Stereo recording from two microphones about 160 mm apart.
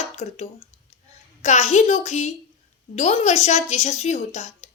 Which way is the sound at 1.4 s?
45° left (ahead or behind).